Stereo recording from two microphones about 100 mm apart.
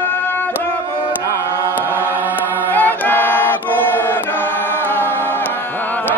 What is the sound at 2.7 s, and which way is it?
Choir, 20° left (ahead or behind).